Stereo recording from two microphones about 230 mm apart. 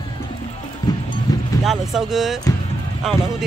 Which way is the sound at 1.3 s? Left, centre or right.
Centre.